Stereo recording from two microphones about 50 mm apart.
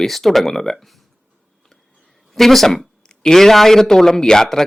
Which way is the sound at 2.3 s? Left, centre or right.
Centre.